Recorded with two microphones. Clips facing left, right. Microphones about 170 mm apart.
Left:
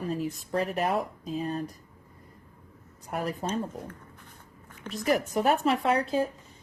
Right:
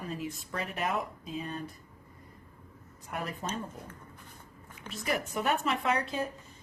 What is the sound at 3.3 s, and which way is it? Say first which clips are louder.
Speech: left 6 dB; 40° left (ahead or behind).